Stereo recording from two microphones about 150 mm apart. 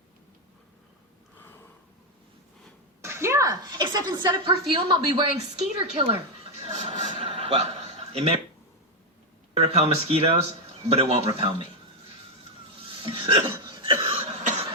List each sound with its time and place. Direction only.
3.0 s a woman's voice: 20° right (ahead or behind); by 6.1 s 40° right (ahead or behind)
6.6 s a sound: 45° right (ahead or behind)
8.1 s speech: 40° right (ahead or behind)
9.6 s speech: 45° right (ahead or behind)
12.9 s hiccup: 35° right (ahead or behind)
13.7 s cough: 35° right (ahead or behind)